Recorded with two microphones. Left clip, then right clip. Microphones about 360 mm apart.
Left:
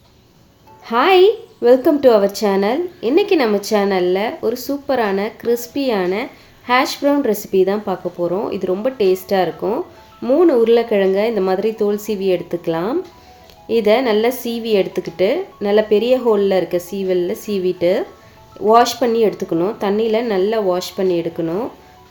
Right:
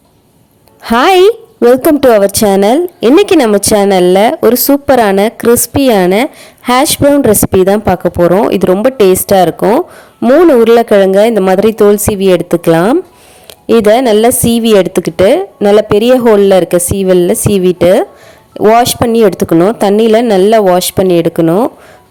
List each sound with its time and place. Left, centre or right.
0.9 s speech: right